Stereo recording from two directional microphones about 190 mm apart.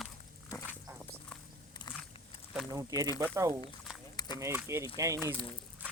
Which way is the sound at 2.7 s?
20° right (ahead or behind).